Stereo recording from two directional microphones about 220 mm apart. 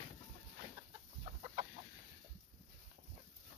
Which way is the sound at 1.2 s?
25° right (ahead or behind).